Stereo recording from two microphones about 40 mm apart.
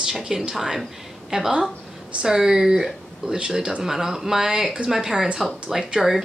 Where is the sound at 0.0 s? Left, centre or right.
Centre.